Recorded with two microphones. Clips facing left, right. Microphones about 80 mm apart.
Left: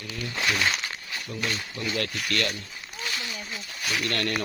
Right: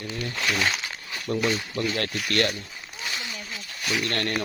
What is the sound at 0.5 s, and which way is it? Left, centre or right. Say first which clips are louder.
Speech: right 1 dB; centre.